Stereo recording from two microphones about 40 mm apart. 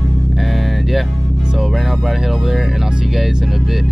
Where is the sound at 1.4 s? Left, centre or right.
Centre.